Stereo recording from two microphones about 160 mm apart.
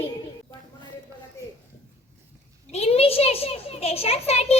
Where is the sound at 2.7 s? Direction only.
40° left (ahead or behind).